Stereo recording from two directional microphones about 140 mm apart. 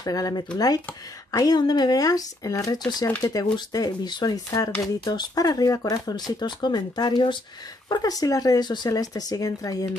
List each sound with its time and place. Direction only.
0.0 s speech: 25° left (ahead or behind)